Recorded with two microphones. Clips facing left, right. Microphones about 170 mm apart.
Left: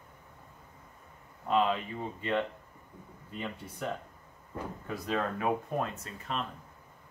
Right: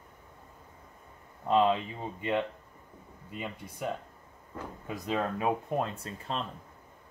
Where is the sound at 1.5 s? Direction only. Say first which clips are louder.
Right 3 dB; 20° right (ahead or behind).